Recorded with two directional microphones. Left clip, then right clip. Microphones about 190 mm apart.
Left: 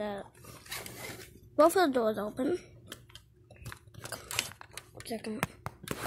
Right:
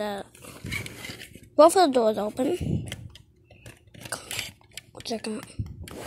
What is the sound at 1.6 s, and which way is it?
A woman's voice, centre (ahead or behind).